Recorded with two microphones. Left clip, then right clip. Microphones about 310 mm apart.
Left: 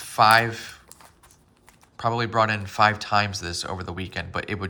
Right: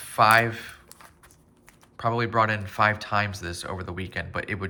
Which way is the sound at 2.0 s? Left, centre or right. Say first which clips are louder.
Left 1 dB; centre.